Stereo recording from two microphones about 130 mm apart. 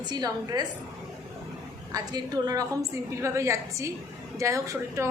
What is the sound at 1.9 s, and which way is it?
A woman's voice, 25° right (ahead or behind).